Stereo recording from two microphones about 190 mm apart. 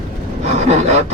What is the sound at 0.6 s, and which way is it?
Speech, 35° right (ahead or behind).